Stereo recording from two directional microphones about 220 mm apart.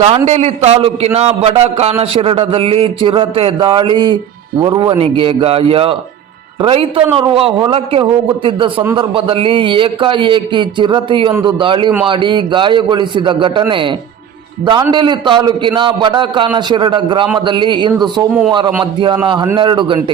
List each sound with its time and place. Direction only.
0.3 s a man's voice: 30° right (ahead or behind)